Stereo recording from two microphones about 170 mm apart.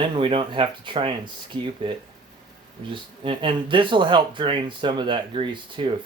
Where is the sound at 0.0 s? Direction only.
30° right (ahead or behind).